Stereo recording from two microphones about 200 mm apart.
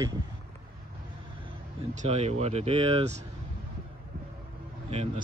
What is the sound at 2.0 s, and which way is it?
Speech, 30° right (ahead or behind).